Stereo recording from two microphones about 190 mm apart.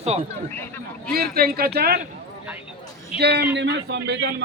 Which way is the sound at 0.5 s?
10° left (ahead or behind).